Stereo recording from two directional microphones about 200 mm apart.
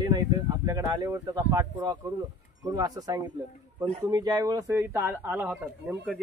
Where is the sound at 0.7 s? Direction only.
15° right (ahead or behind).